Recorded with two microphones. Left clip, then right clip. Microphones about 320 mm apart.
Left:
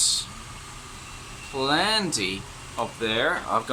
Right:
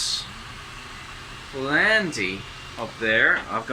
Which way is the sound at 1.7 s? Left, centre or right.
Centre.